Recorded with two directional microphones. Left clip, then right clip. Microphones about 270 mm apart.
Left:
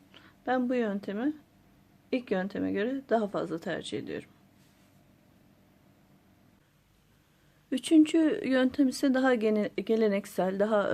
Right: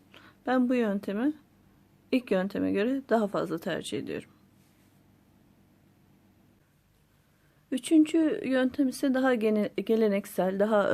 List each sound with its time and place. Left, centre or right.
0.1 s speech: centre
7.7 s speech: centre